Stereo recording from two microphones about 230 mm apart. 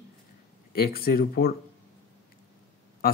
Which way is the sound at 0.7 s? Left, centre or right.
Left.